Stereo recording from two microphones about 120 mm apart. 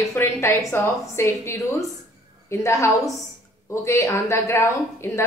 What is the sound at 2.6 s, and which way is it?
A woman's voice, 25° left (ahead or behind).